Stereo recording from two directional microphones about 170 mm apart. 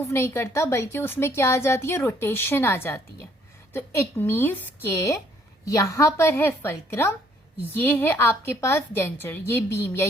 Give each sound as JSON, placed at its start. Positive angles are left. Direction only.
{"t": 0.1, "sound": "a woman's voice", "side_deg": 15}